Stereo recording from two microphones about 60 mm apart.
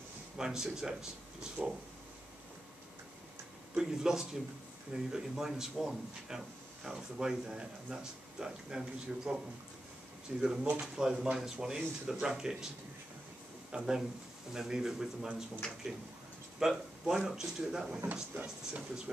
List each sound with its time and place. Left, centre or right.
0.4 s speech: centre
3.7 s speech: centre
10.4 s speech: centre
13.7 s speech: centre
16.5 s speech: centre
18.1 s speech: right